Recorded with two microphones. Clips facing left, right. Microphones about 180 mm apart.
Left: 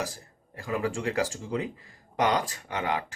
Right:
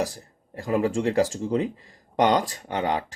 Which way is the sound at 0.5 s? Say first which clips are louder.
Right 6 dB; 35° right (ahead or behind).